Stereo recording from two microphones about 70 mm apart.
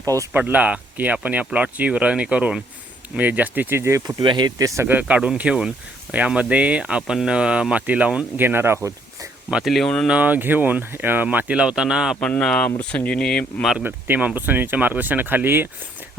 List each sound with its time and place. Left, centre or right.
0.0 s speech: right
0.3 s speech: right
3.8 s speech: right
4.0 s speech: right
4.6 s speech: right
4.9 s speech: right
8.4 s speech: right
9.6 s speech: centre
10.1 s speech: right
12.4 s speech: centre
13.8 s speech: right